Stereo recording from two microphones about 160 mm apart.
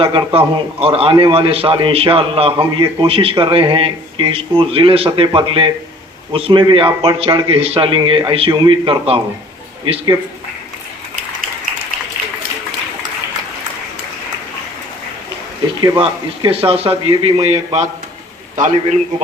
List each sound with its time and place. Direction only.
0.0 s a man's voice: 30° right (ahead or behind)
15.8 s a man's voice: 30° right (ahead or behind); by 18.9 s 50° right (ahead or behind)